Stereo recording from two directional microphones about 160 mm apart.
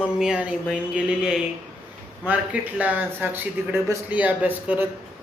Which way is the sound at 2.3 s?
10° right (ahead or behind).